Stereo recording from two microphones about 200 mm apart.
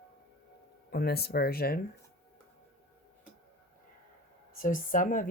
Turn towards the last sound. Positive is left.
turn(degrees=40)  # may be behind; listen again after turning